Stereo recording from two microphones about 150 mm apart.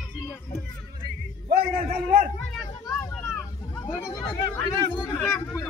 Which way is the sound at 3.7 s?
20° left (ahead or behind).